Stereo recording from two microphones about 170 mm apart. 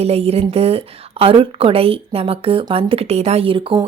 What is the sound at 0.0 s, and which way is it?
Speech, 35° right (ahead or behind).